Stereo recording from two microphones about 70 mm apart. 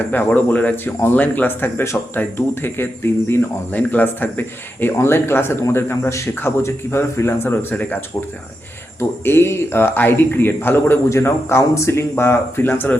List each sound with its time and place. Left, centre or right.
0.1 s speech: left
9.0 s speech: left